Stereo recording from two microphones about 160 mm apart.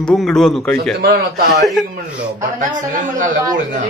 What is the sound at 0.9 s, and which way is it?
Speech, 70° right (ahead or behind).